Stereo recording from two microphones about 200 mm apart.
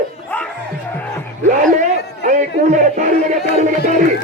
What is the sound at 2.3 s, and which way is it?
Music, 40° right (ahead or behind).